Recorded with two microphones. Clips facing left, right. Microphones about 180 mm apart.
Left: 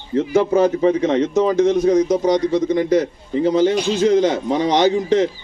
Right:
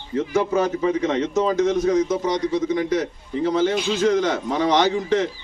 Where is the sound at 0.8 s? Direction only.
35° left (ahead or behind).